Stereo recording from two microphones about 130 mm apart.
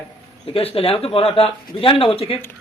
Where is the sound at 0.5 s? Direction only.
45° left (ahead or behind).